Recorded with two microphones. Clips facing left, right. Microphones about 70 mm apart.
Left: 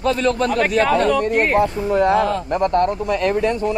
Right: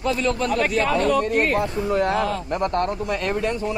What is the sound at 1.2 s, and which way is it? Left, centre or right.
Speech, left.